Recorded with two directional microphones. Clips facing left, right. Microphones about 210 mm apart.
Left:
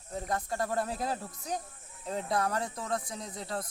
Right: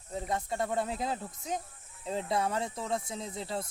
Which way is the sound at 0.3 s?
Centre (ahead or behind).